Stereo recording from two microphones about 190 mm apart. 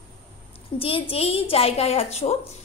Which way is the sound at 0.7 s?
30° left (ahead or behind).